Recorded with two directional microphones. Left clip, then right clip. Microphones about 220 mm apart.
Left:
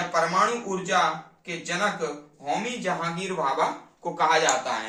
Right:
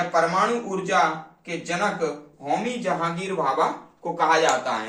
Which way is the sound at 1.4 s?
20° left (ahead or behind).